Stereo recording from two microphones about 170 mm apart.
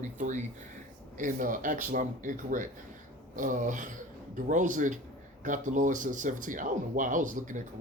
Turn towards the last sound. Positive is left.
turn(degrees=-50)  # may be behind; listen again after turning